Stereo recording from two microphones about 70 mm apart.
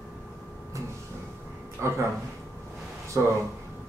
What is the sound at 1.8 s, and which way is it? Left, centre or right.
Speech, right.